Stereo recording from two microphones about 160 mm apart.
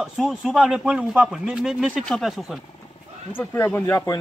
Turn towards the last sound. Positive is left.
turn(degrees=20)  # may be behind; listen again after turning